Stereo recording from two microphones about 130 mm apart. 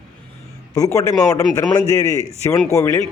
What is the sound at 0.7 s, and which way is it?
A man's voice, 25° left (ahead or behind).